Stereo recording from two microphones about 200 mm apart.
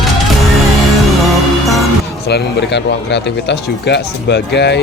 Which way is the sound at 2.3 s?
60° left (ahead or behind).